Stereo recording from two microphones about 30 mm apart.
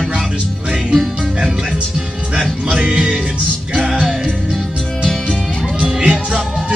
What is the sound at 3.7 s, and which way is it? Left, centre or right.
Music, right.